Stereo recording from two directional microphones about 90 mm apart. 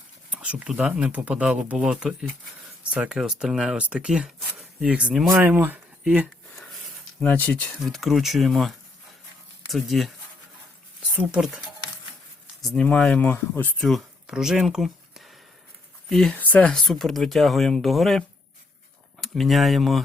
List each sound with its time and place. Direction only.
0.3 s a sound: 15° right (ahead or behind)
0.8 s speech: 10° right (ahead or behind)
7.2 s speech: 20° left (ahead or behind)
7.9 s speech: centre (ahead or behind)
11.1 s speech: 15° right (ahead or behind)
12.8 s speech: 10° left (ahead or behind)
13.8 s a sound: centre (ahead or behind)
14.3 s speech: 5° right (ahead or behind)
16.3 s speech: 15° left (ahead or behind); by 18.2 s centre (ahead or behind)
19.2 s speech: centre (ahead or behind)